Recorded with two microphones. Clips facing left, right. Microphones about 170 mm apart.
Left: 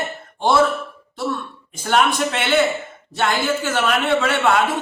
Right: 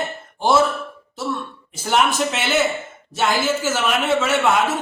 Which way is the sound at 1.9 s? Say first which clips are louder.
Left 1 dB; 5° right (ahead or behind).